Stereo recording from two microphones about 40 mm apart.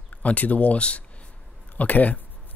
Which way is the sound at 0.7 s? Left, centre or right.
Left.